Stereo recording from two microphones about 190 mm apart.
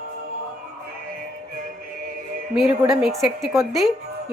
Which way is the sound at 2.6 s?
5° right (ahead or behind).